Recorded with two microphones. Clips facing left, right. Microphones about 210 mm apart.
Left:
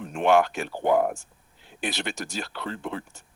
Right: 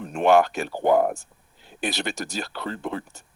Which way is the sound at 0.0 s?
40° right (ahead or behind).